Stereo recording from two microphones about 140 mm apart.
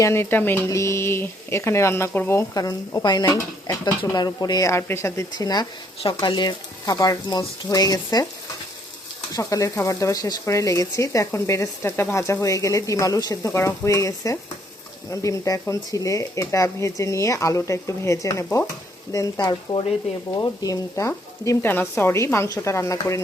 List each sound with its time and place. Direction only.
0.0 s speech: 15° left (ahead or behind)
9.3 s speech: 25° left (ahead or behind)